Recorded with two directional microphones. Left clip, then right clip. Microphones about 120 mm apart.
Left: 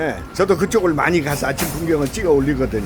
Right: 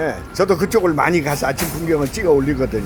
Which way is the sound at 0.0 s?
30° left (ahead or behind).